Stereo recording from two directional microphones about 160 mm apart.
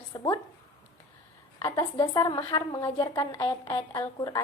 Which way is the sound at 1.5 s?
25° left (ahead or behind).